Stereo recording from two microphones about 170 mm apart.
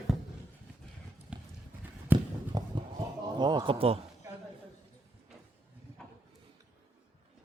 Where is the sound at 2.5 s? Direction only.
25° right (ahead or behind).